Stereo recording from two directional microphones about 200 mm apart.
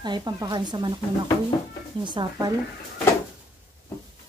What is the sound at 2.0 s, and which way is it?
Speech, 25° right (ahead or behind).